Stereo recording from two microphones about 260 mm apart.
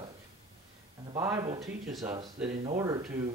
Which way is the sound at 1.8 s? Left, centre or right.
Centre.